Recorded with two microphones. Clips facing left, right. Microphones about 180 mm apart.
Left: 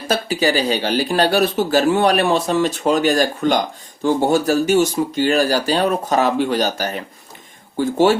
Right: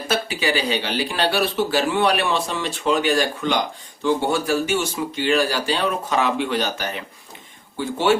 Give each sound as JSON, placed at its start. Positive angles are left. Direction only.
{"t": 0.1, "sound": "speech", "side_deg": 40}